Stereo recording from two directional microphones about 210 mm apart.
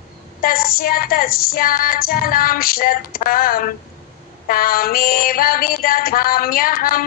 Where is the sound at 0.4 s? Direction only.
45° left (ahead or behind).